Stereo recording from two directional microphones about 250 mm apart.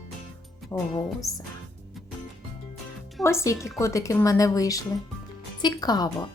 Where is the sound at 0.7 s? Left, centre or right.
Centre.